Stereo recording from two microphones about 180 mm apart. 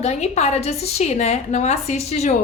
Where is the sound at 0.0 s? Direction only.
35° left (ahead or behind).